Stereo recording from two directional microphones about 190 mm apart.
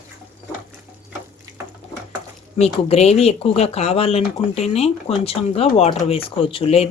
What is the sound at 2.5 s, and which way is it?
Speech, 35° left (ahead or behind).